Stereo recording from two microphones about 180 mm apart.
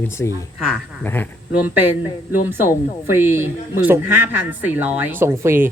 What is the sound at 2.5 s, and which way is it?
Speech, 10° right (ahead or behind).